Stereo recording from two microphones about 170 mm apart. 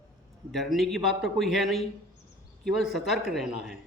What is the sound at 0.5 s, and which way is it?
Speech, centre (ahead or behind).